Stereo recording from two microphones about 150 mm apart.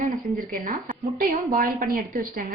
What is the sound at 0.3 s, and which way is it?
A woman's voice, 65° right (ahead or behind).